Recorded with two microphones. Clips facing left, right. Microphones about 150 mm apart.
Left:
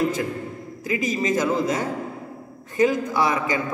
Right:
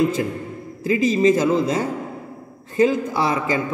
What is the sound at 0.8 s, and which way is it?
Speech, 30° right (ahead or behind).